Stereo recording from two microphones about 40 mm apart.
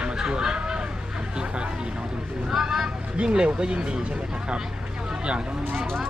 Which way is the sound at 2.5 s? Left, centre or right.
Centre.